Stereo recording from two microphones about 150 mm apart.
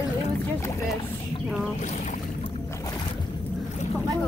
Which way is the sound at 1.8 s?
50° left (ahead or behind).